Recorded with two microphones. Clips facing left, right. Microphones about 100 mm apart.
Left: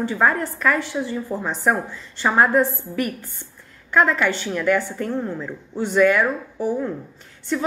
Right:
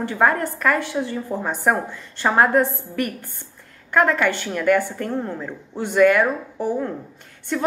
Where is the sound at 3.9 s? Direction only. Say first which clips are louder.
Even; 50° right (ahead or behind).